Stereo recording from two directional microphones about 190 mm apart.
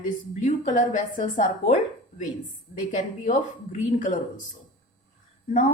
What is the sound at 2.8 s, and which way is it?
A woman's voice, 45° left (ahead or behind).